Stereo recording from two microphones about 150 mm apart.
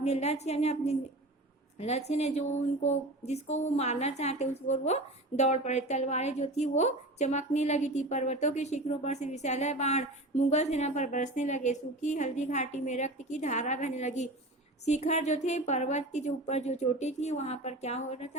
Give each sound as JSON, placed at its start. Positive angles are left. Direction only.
{"t": 0.0, "sound": "a woman's voice", "side_deg": 45}